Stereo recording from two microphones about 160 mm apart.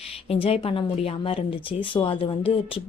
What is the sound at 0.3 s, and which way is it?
Speech, 35° left (ahead or behind).